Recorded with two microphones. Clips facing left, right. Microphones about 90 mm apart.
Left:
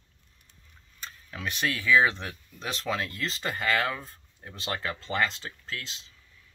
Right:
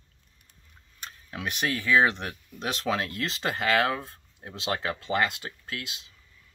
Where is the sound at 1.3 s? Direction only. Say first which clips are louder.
Right 1 dB; 15° right (ahead or behind).